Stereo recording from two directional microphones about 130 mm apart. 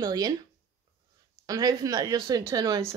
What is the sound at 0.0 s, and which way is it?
Speech, 30° right (ahead or behind).